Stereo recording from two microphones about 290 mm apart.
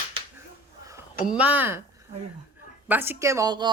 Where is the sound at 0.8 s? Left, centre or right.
Centre.